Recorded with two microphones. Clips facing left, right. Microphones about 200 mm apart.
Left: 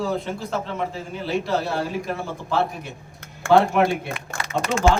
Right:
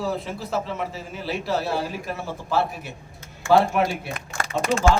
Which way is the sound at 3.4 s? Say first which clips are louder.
Left 1 dB; 65° left (ahead or behind).